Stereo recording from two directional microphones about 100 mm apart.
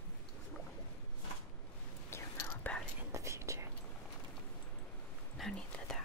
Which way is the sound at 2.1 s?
25° left (ahead or behind).